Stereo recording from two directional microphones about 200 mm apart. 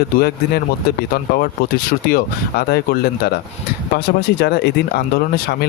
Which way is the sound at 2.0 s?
50° left (ahead or behind).